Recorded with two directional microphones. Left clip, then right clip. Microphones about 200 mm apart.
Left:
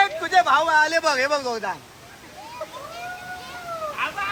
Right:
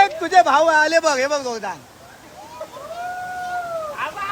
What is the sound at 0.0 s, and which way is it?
Speech, 25° right (ahead or behind).